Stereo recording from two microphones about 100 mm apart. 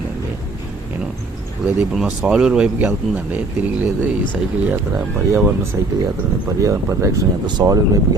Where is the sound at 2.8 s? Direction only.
25° right (ahead or behind).